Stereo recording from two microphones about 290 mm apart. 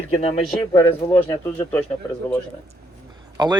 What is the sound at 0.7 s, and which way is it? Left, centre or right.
Speech, centre.